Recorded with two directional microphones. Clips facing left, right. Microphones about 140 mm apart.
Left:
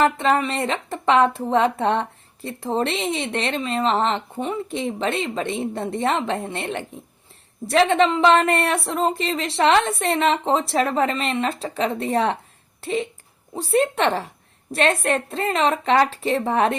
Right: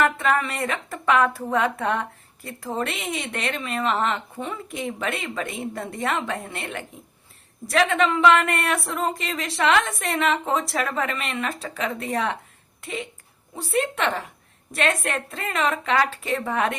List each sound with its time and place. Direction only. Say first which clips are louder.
0.0 s a woman's voice: left 3 dB; 25° left (ahead or behind)